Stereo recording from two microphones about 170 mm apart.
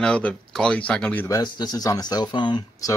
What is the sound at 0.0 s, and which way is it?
Speech, 5° left (ahead or behind).